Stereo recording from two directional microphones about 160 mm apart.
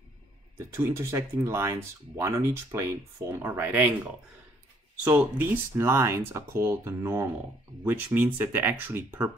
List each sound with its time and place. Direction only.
0.6 s speech: 15° right (ahead or behind)
5.0 s speech: 10° right (ahead or behind)